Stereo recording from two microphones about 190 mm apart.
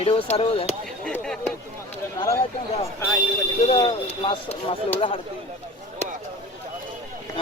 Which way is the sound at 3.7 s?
30° left (ahead or behind).